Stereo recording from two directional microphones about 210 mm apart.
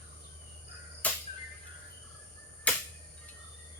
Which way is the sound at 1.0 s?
5° left (ahead or behind).